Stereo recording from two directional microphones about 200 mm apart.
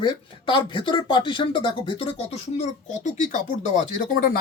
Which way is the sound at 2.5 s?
35° left (ahead or behind).